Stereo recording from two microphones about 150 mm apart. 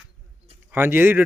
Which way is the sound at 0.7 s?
15° right (ahead or behind).